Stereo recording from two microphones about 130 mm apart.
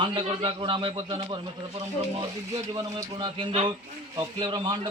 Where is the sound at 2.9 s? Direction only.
40° right (ahead or behind).